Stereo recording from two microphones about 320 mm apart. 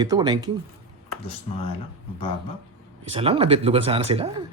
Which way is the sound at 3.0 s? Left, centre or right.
Centre.